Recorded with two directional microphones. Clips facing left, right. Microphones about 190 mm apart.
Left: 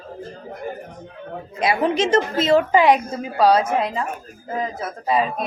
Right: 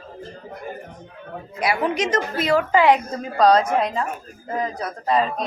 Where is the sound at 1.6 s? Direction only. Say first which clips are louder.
Left 3 dB; 25° left (ahead or behind).